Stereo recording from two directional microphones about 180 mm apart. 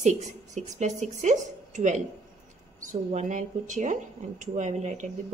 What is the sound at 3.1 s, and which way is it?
A woman's voice, 40° right (ahead or behind).